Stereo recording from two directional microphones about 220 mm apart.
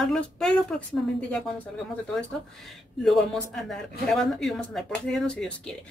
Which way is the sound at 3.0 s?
Centre (ahead or behind).